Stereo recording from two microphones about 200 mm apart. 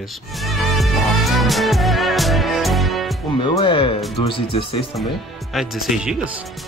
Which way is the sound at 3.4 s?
25° left (ahead or behind).